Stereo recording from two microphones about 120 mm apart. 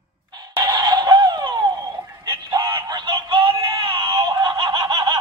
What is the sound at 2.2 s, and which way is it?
Synthetic singing, 35° right (ahead or behind).